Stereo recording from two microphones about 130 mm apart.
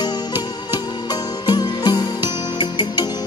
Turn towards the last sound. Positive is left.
turn(degrees=35)  # may be behind; listen again after turning